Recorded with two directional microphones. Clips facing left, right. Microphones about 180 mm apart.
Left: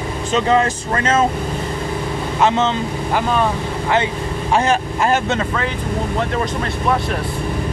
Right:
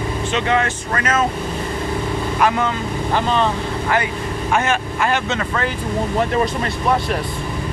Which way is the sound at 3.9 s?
30° left (ahead or behind).